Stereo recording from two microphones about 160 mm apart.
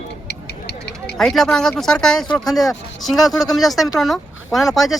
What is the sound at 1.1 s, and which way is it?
Speech, centre (ahead or behind).